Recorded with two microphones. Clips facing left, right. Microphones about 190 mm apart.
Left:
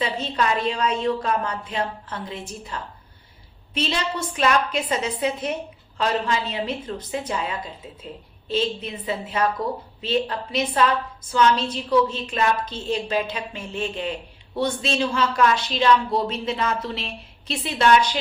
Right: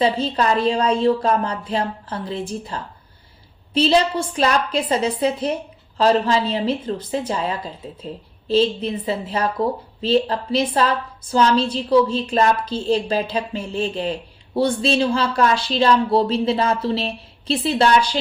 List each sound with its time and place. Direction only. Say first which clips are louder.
0.0 s a woman's voice: right 5 dB; 35° right (ahead or behind)
4.4 s a woman's voice: right 1 dB; 35° right (ahead or behind)